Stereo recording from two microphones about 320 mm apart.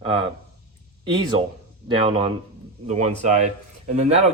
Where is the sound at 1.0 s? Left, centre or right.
Centre.